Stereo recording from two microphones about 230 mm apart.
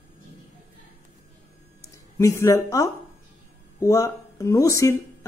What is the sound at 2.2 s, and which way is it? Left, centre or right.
A woman's voice, centre.